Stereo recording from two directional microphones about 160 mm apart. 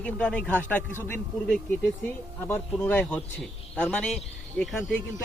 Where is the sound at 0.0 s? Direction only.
5° left (ahead or behind).